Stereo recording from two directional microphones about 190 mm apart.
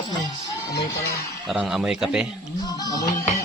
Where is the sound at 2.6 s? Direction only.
20° left (ahead or behind).